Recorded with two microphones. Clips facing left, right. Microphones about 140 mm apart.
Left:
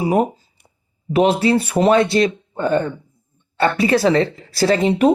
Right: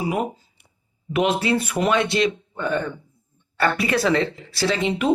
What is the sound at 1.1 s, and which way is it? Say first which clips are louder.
Speech: left 5 dB; 35° left (ahead or behind).